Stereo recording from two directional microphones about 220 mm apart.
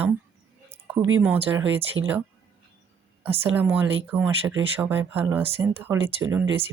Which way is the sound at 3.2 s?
10° right (ahead or behind).